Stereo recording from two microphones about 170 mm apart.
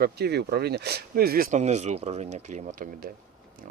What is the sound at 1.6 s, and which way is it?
Speech, 40° right (ahead or behind).